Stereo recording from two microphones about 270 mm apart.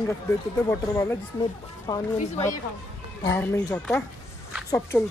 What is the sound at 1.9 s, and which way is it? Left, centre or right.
Speech, left.